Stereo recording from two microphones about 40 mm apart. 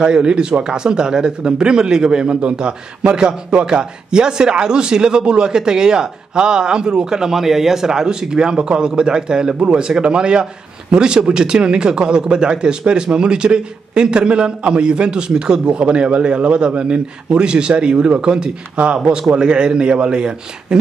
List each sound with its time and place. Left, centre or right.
0.0 s speech: right